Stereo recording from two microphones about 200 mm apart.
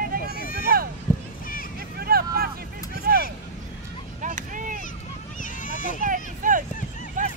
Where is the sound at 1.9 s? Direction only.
50° right (ahead or behind).